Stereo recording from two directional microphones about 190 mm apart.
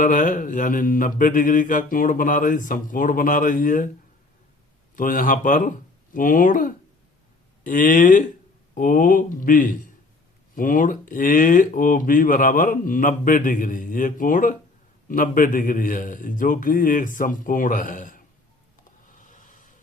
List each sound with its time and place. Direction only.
0.0 s speech: 45° left (ahead or behind)
4.9 s speech: 45° left (ahead or behind)
19.1 s a sound: 45° left (ahead or behind)